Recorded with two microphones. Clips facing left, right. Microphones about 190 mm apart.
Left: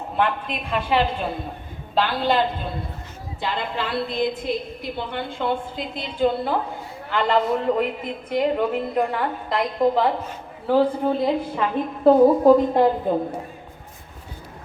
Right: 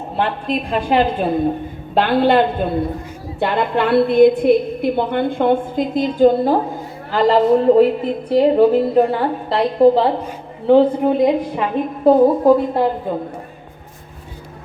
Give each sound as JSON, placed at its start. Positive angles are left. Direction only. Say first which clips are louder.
{"t": 0.2, "sound": "a woman's voice", "louder": "right 4 dB", "side_deg": -35}
{"t": 2.0, "sound": "a woman's voice", "louder": "right 7 dB", "side_deg": -55}
{"t": 10.7, "sound": "a woman's voice", "louder": "right 7 dB", "side_deg": -20}